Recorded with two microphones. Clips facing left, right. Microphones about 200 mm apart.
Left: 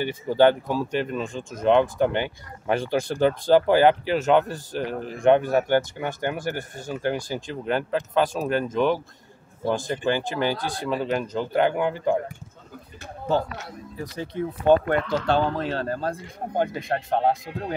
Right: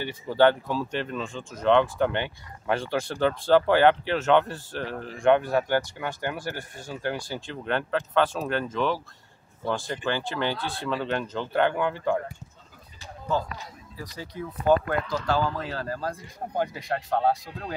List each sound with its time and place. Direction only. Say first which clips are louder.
0.0 s speech: left 2 dB; 15° left (ahead or behind)
10.6 s speech: left 3 dB; 40° left (ahead or behind)
10.9 s speech: left 3 dB; 10° left (ahead or behind)
13.4 s speech: left 4 dB; 75° left (ahead or behind)
14.1 s speech: left 7 dB; 25° left (ahead or behind)